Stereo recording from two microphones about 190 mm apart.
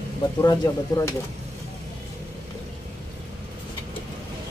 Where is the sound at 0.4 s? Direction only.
20° left (ahead or behind).